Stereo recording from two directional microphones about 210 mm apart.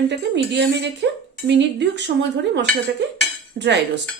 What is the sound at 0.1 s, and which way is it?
Speech, 55° right (ahead or behind).